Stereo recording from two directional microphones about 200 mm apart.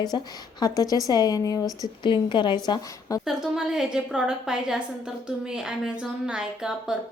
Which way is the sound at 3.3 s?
5° right (ahead or behind).